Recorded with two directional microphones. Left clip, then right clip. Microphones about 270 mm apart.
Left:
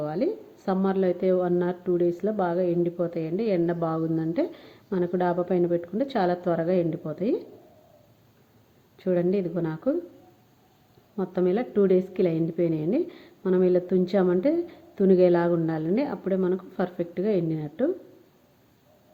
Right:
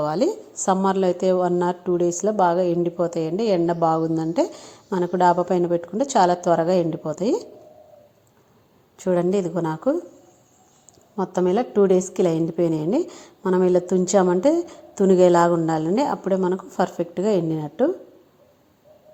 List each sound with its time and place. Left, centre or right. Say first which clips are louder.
0.6 s a woman's voice: right 6 dB; centre
9.0 s a woman's voice: right 4 dB; centre
11.2 s a woman's voice: right 4 dB; centre